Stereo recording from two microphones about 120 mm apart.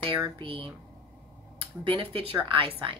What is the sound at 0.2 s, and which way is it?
Speech, 45° right (ahead or behind).